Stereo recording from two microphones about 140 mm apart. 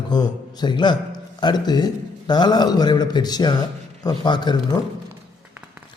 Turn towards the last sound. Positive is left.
turn(degrees=30)  # may be behind; listen again after turning